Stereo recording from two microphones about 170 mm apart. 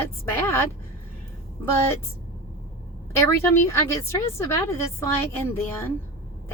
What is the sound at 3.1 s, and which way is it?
A woman's voice, 15° left (ahead or behind).